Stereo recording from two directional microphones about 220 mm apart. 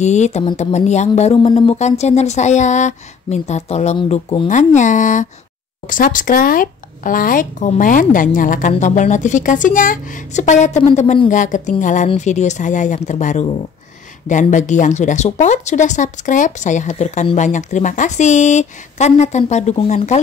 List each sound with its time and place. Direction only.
0.0 s speech: 30° left (ahead or behind)